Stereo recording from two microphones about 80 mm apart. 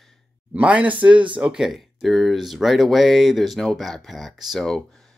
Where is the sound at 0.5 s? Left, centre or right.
Centre.